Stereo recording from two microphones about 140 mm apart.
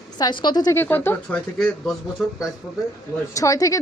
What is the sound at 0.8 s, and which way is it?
Speech, 15° left (ahead or behind).